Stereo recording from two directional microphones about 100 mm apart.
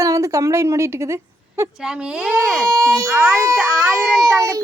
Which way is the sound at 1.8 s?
10° right (ahead or behind).